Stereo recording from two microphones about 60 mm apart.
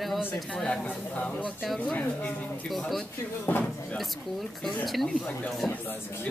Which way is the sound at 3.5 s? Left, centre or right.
Left.